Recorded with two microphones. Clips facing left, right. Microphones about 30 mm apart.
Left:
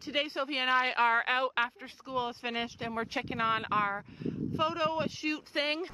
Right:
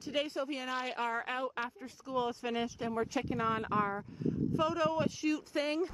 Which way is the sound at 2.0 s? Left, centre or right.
Left.